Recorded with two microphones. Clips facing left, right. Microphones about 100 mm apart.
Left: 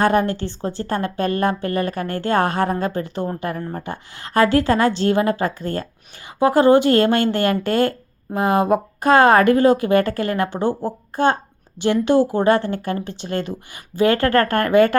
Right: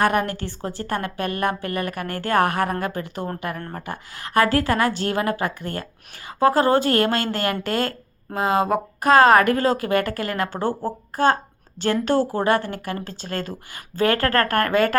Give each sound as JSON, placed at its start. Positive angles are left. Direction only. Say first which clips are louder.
{"t": 0.0, "sound": "speech", "louder": "left 3 dB", "side_deg": 25}